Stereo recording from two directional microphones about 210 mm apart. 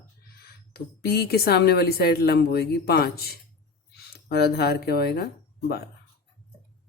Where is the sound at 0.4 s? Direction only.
50° left (ahead or behind).